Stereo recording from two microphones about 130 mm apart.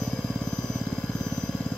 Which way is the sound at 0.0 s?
Centre (ahead or behind).